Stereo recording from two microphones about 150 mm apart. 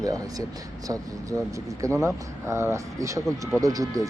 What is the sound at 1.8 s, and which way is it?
Speech, 20° right (ahead or behind).